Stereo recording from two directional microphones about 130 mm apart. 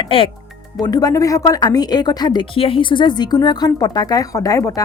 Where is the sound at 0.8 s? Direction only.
30° left (ahead or behind).